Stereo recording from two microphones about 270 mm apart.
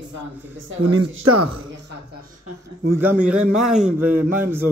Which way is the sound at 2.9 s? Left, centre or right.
Centre.